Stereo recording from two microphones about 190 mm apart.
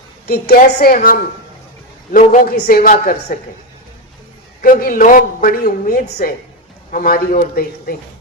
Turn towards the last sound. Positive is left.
turn(degrees=50)  # may be behind; listen again after turning